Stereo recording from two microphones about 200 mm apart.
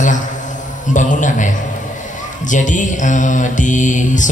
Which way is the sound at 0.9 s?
40° left (ahead or behind).